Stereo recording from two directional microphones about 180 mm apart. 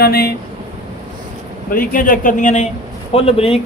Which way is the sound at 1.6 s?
50° left (ahead or behind).